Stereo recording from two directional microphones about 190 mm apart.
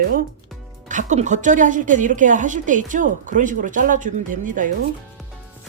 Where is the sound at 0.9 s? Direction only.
40° right (ahead or behind).